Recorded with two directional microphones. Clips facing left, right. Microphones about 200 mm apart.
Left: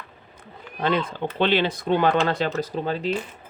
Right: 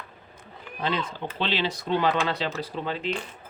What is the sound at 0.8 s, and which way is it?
Speech, 55° left (ahead or behind).